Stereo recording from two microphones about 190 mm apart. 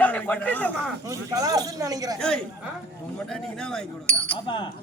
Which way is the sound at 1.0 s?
20° right (ahead or behind).